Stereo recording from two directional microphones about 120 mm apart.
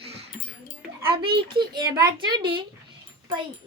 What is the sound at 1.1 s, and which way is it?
Speech, 45° right (ahead or behind).